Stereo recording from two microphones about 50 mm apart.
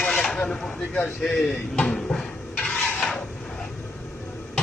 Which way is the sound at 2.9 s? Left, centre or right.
Centre.